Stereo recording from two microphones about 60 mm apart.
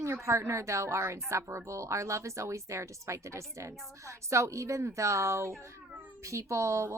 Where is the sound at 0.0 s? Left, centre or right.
Right.